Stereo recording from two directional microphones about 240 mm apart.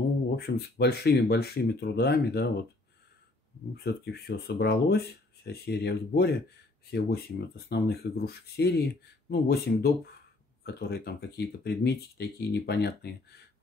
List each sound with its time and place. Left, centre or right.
0.5 s speech: left
3.7 s speech: left